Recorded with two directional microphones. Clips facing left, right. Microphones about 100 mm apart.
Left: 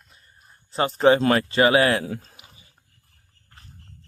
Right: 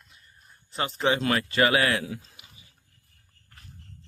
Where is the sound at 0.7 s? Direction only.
35° left (ahead or behind).